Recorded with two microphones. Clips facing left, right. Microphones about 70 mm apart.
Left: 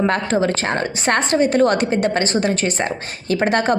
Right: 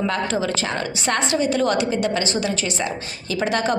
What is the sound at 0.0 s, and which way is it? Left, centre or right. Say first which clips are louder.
A woman's voice: left 4 dB; left.